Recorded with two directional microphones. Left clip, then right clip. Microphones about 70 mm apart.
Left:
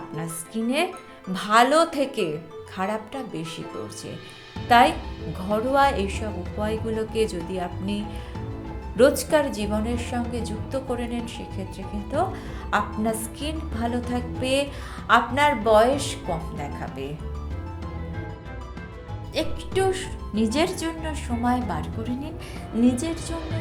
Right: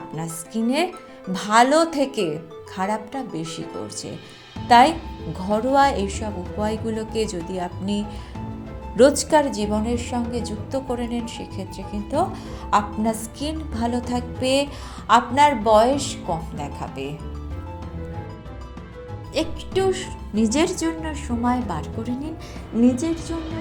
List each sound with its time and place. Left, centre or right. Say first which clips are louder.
0.2 s a woman's voice: right 3 dB; right
4.7 s a woman's voice: right 3 dB; right
6.6 s a woman's voice: right 1 dB; right
9.0 s a woman's voice: right 3 dB; right
11.3 s a woman's voice: right 2 dB; right
16.6 s speech: right 2 dB; right
19.4 s speech: right 3 dB; right
19.7 s a woman's voice: right 2 dB; right
20.3 s a woman's voice: right 2 dB; right
21.0 s a woman's voice: right 2 dB; right
22.7 s a woman's voice: right 3 dB; right